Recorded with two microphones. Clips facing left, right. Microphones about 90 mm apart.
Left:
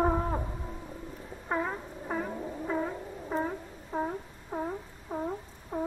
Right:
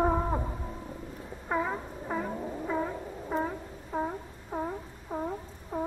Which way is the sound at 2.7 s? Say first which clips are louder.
Even; centre (ahead or behind).